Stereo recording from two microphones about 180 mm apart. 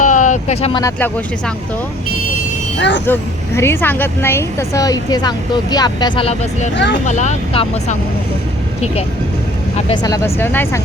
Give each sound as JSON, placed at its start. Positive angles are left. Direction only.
{"t": 0.0, "sound": "vehicle", "side_deg": 45}
{"t": 0.8, "sound": "speech", "side_deg": 15}
{"t": 2.7, "sound": "speech", "side_deg": 80}
{"t": 3.1, "sound": "speech", "side_deg": 15}
{"t": 7.0, "sound": "speech", "side_deg": 40}
{"t": 9.7, "sound": "speech", "side_deg": 25}